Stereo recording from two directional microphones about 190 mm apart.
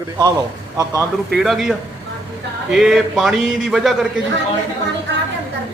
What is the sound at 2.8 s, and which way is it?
Speech, centre (ahead or behind).